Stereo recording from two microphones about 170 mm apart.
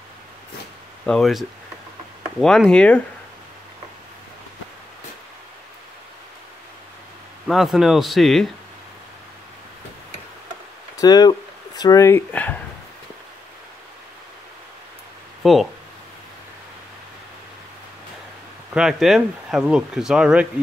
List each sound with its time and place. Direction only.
1.0 s speech: centre (ahead or behind)
2.4 s speech: 5° left (ahead or behind)
7.4 s speech: centre (ahead or behind)
11.0 s speech: 25° left (ahead or behind)
15.4 s speech: centre (ahead or behind)
18.7 s speech: 5° right (ahead or behind)